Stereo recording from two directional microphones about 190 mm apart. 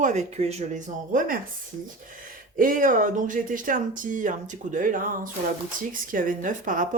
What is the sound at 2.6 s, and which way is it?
Speech, 45° right (ahead or behind).